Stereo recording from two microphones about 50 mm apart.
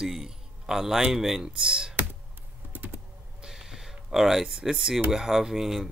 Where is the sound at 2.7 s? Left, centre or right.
Right.